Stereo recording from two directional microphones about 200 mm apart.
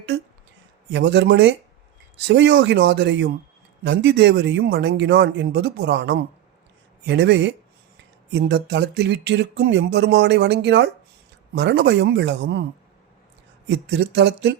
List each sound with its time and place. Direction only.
0.9 s speech: 60° right (ahead or behind)
13.7 s speech: 55° right (ahead or behind)